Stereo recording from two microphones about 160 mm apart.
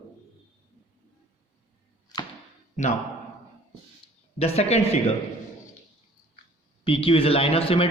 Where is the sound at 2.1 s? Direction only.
25° left (ahead or behind).